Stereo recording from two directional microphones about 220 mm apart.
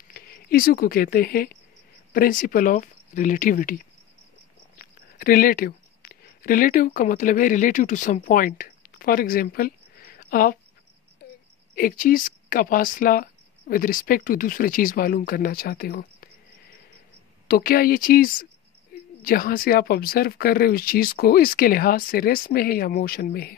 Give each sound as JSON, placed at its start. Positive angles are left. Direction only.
{"t": 0.1, "sound": "speech", "side_deg": 40}
{"t": 11.7, "sound": "speech", "side_deg": 40}
{"t": 17.5, "sound": "speech", "side_deg": 40}